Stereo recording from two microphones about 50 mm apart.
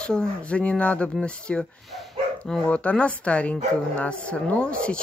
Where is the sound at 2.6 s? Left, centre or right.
Left.